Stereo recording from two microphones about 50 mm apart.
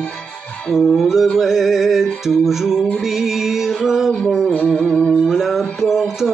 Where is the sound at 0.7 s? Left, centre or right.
Centre.